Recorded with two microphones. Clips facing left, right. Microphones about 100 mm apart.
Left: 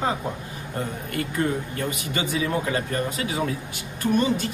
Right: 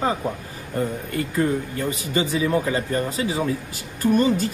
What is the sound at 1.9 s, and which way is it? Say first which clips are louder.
Speech: right 4 dB; 30° right (ahead or behind).